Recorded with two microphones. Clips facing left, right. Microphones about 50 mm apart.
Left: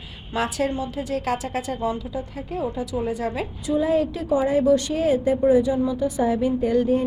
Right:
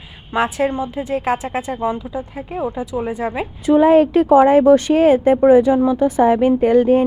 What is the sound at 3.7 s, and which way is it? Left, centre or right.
Speech, right.